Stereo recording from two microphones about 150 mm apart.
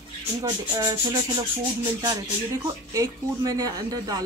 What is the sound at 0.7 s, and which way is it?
Speech, 30° right (ahead or behind).